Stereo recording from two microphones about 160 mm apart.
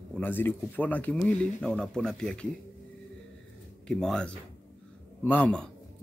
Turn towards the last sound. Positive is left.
turn(degrees=5)  # may be behind; listen again after turning